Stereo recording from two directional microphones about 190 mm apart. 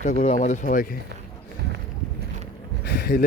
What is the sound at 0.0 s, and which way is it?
Speech, 40° left (ahead or behind).